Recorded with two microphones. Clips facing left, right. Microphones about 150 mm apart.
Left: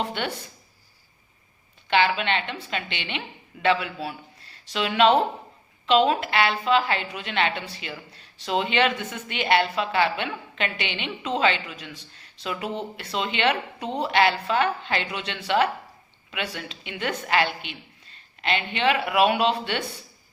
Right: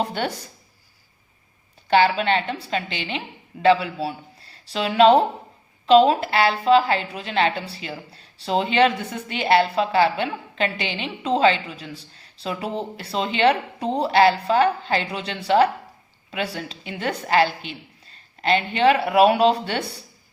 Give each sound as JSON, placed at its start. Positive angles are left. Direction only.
{"t": 0.0, "sound": "a woman's voice", "side_deg": -40}
{"t": 1.9, "sound": "a woman's voice", "side_deg": -40}